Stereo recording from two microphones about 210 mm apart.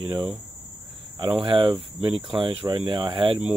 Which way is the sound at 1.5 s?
25° right (ahead or behind).